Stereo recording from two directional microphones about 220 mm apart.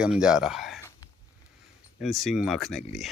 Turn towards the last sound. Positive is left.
turn(degrees=0)  # may be behind; listen again after turning